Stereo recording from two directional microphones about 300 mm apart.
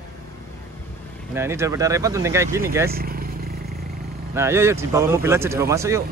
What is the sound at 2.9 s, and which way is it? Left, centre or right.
Vehicle, right.